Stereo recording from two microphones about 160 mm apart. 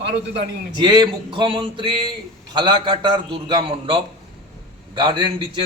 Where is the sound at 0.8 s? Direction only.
25° right (ahead or behind).